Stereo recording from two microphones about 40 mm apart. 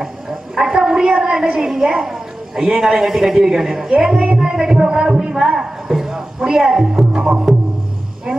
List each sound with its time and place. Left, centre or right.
0.0 s a sound: centre
1.7 s a man's voice: centre
4.8 s speech: right
5.1 s a man's voice: centre